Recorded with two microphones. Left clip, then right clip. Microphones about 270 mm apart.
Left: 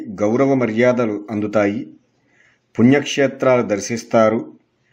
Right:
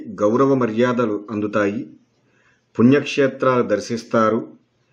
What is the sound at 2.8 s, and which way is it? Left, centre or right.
A man's voice, centre.